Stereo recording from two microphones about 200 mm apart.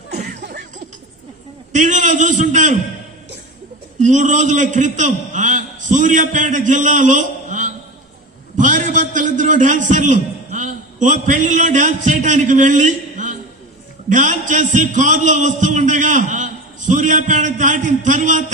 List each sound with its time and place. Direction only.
1.7 s a man's voice: 40° right (ahead or behind)
4.0 s a man's voice: 40° right (ahead or behind)
8.5 s a sound: 40° right (ahead or behind)
14.1 s a man's voice: 40° right (ahead or behind)